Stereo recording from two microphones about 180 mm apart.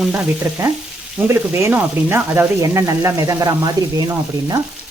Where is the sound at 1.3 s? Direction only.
10° right (ahead or behind).